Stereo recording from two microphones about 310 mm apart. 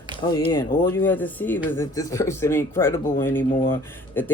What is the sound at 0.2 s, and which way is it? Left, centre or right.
Speech, centre.